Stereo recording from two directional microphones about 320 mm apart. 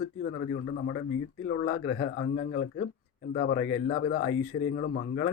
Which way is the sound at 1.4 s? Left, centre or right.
Left.